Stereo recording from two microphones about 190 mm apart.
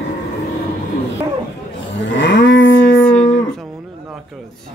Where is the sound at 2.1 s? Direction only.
70° left (ahead or behind).